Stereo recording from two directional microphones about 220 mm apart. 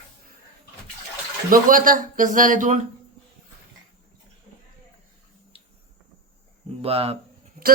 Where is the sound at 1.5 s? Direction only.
40° right (ahead or behind).